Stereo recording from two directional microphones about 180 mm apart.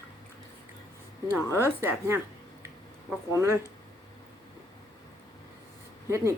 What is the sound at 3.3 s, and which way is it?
Speech, 15° right (ahead or behind).